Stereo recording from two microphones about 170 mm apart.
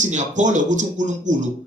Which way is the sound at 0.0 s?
45° right (ahead or behind).